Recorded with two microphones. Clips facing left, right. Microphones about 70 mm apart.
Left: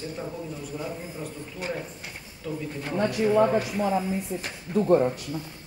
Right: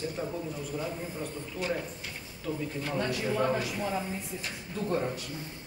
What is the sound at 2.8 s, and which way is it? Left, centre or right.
Speech, left.